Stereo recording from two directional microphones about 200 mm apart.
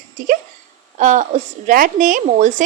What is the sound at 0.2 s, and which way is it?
A woman's voice, 40° right (ahead or behind).